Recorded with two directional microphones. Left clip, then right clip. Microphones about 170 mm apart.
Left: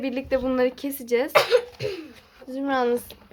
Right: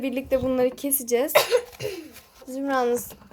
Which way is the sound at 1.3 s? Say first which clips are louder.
Left 3 dB; 30° left (ahead or behind).